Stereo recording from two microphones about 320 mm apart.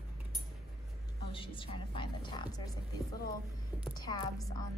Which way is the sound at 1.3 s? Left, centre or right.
Centre.